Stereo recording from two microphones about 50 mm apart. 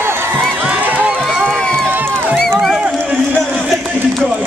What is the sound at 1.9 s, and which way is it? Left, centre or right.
Music, right.